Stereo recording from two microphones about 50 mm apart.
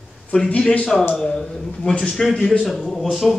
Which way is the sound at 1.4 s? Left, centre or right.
Centre.